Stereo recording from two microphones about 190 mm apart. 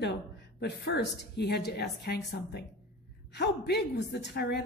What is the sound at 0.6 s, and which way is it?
A woman's voice, 60° left (ahead or behind).